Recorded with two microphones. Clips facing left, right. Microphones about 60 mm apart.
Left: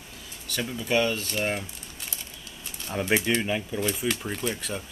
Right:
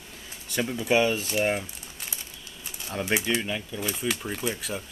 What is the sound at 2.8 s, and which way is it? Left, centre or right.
Speech, centre.